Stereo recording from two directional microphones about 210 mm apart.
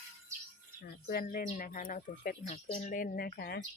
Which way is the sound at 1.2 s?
35° left (ahead or behind).